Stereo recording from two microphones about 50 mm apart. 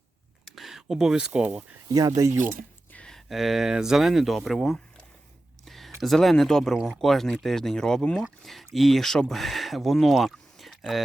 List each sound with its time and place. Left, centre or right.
0.4 s speech: centre
2.1 s speech: right
3.0 s a sound: centre
3.2 s speech: centre
5.6 s a sound: centre
6.1 s speech: centre